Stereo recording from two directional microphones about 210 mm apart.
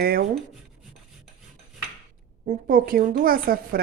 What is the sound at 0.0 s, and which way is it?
Speech, 45° right (ahead or behind).